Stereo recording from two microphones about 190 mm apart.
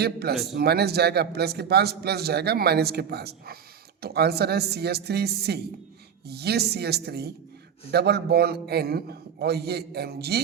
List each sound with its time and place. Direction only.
0.0 s a man's voice: 55° right (ahead or behind)